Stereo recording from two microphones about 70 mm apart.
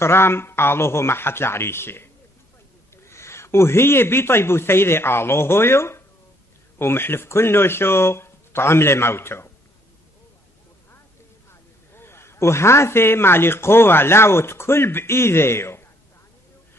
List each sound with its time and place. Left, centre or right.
0.0 s a man's voice: left
3.1 s a man's voice: left
11.9 s a man's voice: left